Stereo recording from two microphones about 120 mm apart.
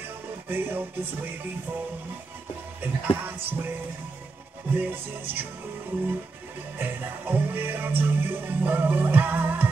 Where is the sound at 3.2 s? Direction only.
20° right (ahead or behind).